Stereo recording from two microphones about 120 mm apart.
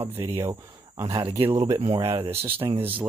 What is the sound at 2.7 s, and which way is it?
Speech, 15° right (ahead or behind).